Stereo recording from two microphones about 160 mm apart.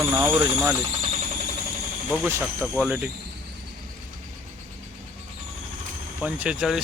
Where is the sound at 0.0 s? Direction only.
15° right (ahead or behind).